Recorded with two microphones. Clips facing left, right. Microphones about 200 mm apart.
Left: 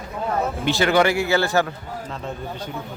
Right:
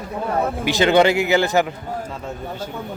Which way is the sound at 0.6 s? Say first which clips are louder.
Right 3 dB; 20° right (ahead or behind).